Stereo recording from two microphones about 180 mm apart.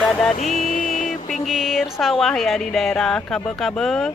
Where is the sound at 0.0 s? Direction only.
5° left (ahead or behind).